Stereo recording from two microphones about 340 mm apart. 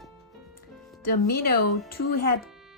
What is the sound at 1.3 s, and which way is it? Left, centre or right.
Speech, left.